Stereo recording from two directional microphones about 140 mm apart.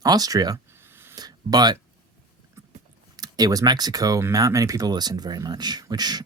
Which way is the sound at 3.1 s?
30° right (ahead or behind).